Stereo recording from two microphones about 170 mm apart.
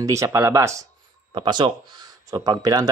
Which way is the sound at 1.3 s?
25° right (ahead or behind).